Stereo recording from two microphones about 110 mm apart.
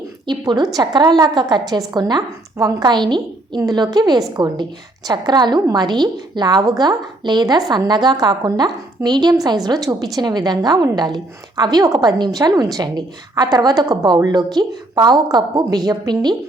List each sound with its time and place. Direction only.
0.3 s a woman's voice: 35° right (ahead or behind)